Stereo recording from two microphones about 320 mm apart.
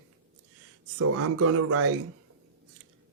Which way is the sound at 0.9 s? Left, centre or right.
Right.